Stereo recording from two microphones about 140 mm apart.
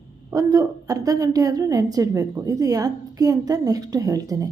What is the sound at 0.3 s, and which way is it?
A woman's voice, 25° right (ahead or behind).